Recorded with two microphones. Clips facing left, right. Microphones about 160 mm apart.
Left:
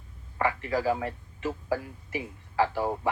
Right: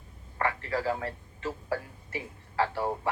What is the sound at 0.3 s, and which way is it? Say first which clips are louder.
A man's voice: left 3 dB; 20° left (ahead or behind).